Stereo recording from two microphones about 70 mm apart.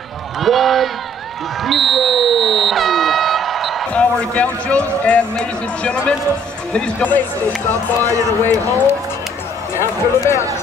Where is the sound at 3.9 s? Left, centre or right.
Centre.